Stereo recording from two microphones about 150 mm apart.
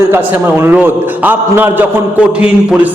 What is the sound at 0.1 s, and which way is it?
A man's voice, 15° right (ahead or behind).